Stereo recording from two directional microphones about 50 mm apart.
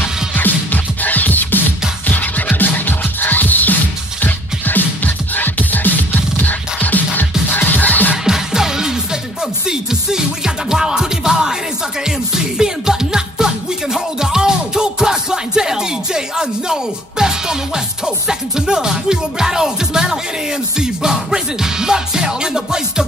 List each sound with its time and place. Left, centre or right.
0.4 s music: left
8.3 s music: centre
12.5 s music: centre